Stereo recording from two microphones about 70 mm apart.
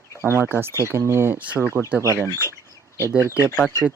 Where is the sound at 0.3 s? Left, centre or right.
Right.